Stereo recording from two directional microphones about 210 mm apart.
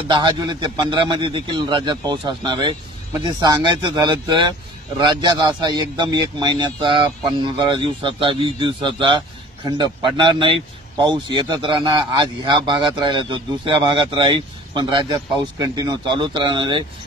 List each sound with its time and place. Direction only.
0.1 s speech: 20° right (ahead or behind)